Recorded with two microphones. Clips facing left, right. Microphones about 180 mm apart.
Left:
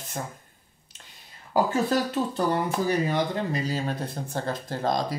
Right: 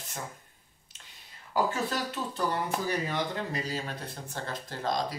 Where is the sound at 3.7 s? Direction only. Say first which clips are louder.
Left 7 dB; 35° left (ahead or behind).